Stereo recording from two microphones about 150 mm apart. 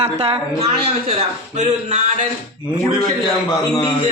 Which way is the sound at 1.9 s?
55° right (ahead or behind).